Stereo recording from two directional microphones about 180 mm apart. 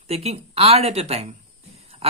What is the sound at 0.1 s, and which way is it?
Speech, 35° right (ahead or behind).